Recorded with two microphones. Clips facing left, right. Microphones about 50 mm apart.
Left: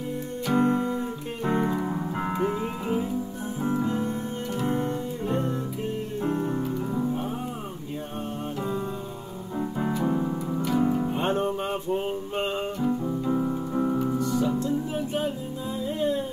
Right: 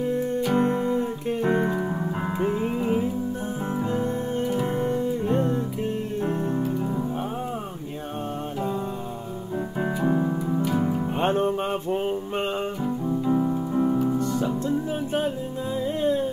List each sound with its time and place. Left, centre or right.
0.5 s music: right
1.6 s music: centre
3.8 s music: right
4.5 s music: centre
6.4 s music: centre
9.8 s keyboard: centre
10.8 s music: centre
11.1 s music: right
12.8 s piano: centre
14.1 s music: right